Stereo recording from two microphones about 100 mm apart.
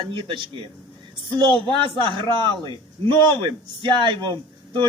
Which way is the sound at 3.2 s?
50° right (ahead or behind).